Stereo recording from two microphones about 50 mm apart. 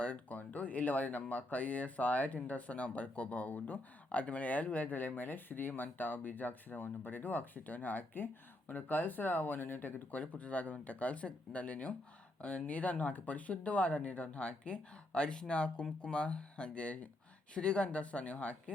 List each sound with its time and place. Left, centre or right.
0.0 s speech: left